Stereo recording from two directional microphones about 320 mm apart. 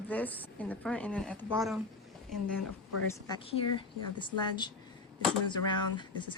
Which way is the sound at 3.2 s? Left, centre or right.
Centre.